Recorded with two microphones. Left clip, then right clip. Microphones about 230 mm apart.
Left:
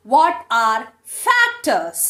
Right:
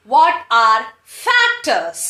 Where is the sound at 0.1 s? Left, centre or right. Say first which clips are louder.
Right 2 dB; left.